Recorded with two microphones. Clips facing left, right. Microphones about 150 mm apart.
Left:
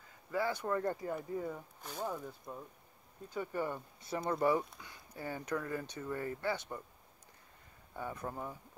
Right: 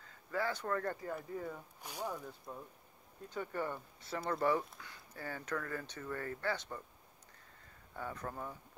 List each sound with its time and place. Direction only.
0.3 s speech: 15° left (ahead or behind)
1.8 s speech: 10° right (ahead or behind)
2.0 s speech: 5° left (ahead or behind)
7.9 s speech: 15° left (ahead or behind)